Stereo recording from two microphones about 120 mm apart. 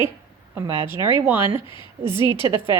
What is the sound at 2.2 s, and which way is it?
Speech, 40° left (ahead or behind).